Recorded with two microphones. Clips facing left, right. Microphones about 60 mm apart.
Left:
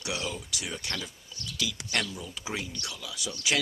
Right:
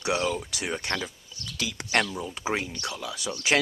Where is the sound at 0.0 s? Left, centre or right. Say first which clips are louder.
Right 8 dB; right.